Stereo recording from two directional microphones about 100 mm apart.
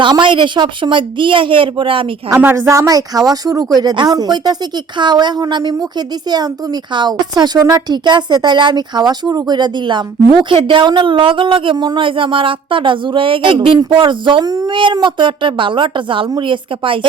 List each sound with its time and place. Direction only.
0.0 s a woman's voice: 55° right (ahead or behind)
2.3 s a woman's voice: 25° right (ahead or behind); by 17.1 s 60° right (ahead or behind)